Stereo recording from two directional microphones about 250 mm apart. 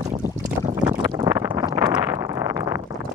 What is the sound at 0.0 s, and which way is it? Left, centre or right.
Boat, right.